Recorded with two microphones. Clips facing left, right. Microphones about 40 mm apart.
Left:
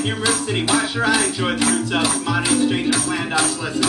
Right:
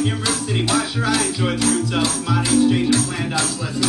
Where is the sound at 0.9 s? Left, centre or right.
Left.